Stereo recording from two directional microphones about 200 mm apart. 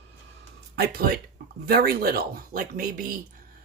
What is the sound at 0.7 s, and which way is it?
Speech, 55° right (ahead or behind).